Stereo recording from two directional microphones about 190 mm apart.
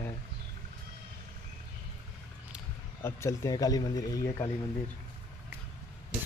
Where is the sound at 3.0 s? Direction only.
15° left (ahead or behind).